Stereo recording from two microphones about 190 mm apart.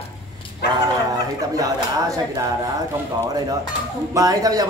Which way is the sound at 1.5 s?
20° right (ahead or behind).